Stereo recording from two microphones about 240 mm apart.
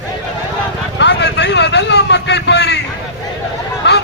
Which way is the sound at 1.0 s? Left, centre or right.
Left.